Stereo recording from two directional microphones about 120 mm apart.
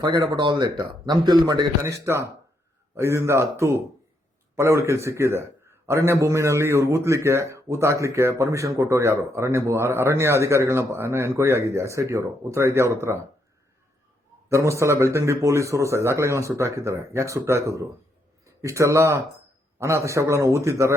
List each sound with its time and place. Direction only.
0.0 s speech: 35° right (ahead or behind)
1.8 s a man's voice: 20° right (ahead or behind)
14.5 s a man's voice: 25° right (ahead or behind)